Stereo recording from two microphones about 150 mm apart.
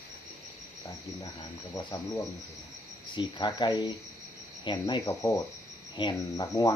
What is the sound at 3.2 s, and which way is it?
Speech, 30° left (ahead or behind).